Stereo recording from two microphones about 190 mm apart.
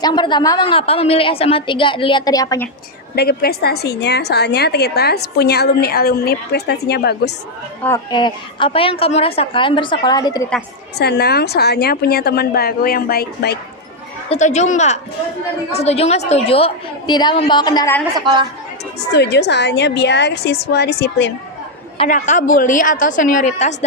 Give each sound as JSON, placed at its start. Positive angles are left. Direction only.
{"t": 0.0, "sound": "a woman's voice", "side_deg": 25}
{"t": 3.2, "sound": "a woman's voice", "side_deg": 55}
{"t": 7.9, "sound": "a woman's voice", "side_deg": 20}
{"t": 10.9, "sound": "a woman's voice", "side_deg": 60}
{"t": 14.3, "sound": "a woman's voice", "side_deg": 35}
{"t": 19.1, "sound": "a woman's voice", "side_deg": 65}
{"t": 21.9, "sound": "a woman's voice", "side_deg": 40}